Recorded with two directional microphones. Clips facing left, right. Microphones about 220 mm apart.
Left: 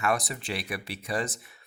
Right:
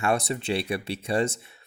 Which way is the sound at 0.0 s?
25° right (ahead or behind).